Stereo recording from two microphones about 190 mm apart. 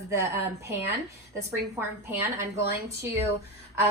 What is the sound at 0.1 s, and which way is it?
A woman's voice, 15° right (ahead or behind).